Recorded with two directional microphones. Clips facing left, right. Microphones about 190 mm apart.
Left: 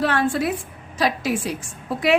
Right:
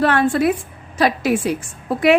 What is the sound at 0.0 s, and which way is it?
A woman's voice, 55° right (ahead or behind).